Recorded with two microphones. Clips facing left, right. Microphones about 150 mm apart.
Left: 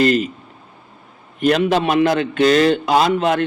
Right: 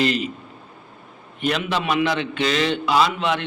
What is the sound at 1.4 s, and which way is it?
A man's voice, 45° left (ahead or behind).